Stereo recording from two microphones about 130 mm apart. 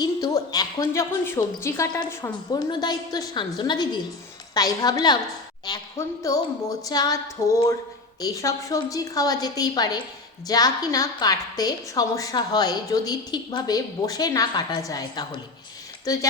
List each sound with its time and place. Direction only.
0.0 s a woman's voice: 30° left (ahead or behind)